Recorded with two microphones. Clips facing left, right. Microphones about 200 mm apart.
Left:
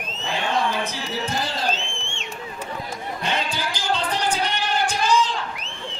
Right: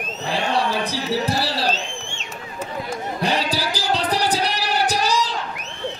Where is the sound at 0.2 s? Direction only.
35° right (ahead or behind).